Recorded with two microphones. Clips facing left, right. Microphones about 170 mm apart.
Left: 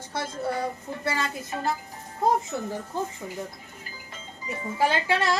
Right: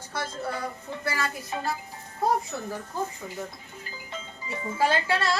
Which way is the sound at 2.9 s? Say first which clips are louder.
Left 1 dB; 25° left (ahead or behind).